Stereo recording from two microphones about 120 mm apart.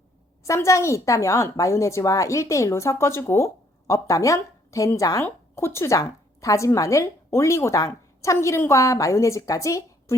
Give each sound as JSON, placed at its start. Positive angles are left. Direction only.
{"t": 0.4, "sound": "a woman's voice", "side_deg": 25}